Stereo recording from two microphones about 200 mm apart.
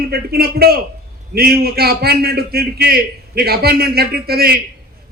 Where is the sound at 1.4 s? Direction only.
50° right (ahead or behind).